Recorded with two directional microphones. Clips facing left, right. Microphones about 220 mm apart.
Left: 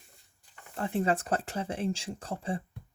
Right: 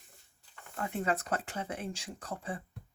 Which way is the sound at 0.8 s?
30° left (ahead or behind).